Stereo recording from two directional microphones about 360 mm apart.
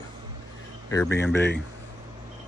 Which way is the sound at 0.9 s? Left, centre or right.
Centre.